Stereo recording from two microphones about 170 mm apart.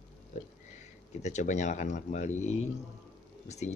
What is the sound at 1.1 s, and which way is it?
Speech, 45° left (ahead or behind).